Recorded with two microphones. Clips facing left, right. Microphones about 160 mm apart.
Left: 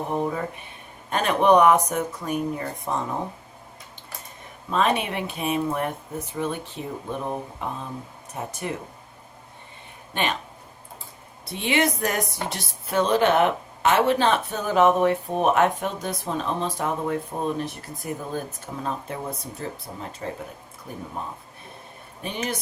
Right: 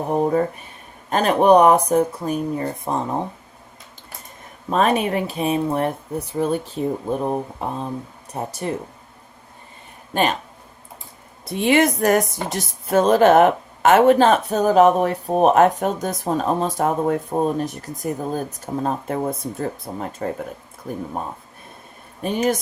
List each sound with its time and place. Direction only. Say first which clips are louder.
0.1 s speech: right 10 dB; 40° right (ahead or behind)
4.7 s speech: right 5 dB; 40° right (ahead or behind)
11.4 s a woman's voice: right 6 dB; 50° right (ahead or behind)
22.2 s a woman's voice: right 10 dB; 45° right (ahead or behind)